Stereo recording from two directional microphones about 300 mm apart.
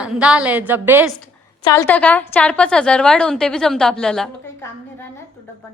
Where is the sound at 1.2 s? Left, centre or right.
Centre.